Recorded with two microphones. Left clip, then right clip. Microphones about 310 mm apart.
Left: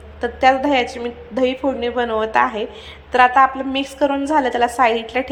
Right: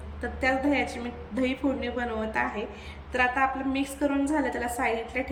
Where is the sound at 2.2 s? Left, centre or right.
Left.